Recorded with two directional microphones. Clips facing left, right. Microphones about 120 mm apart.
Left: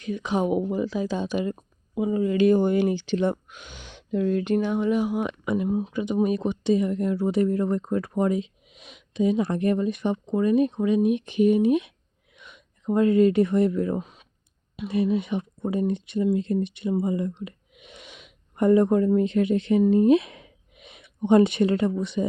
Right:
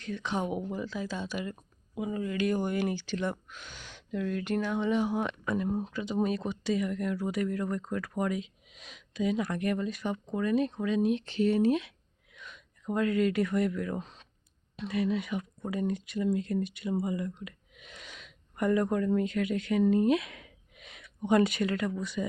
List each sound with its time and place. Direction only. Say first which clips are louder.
0.0 s speech: left 7 dB; 15° left (ahead or behind)
14.0 s clicking: left 4 dB; 10° left (ahead or behind)
14.8 s speech: left 6 dB; 25° left (ahead or behind)